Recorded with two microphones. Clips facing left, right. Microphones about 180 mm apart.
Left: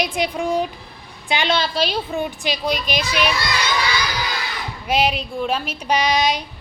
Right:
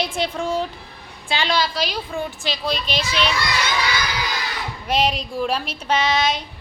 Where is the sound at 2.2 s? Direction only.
15° left (ahead or behind).